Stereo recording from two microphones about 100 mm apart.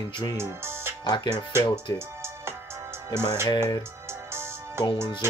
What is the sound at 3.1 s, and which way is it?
Speech, 45° left (ahead or behind).